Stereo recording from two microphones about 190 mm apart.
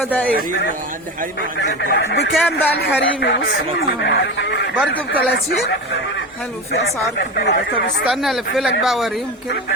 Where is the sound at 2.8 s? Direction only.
70° left (ahead or behind).